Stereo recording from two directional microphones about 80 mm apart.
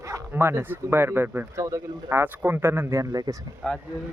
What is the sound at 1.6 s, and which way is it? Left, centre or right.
Speech, right.